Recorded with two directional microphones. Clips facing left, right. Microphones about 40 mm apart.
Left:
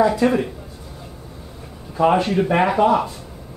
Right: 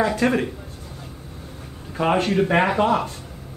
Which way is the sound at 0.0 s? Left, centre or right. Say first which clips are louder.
Left 4 dB; right.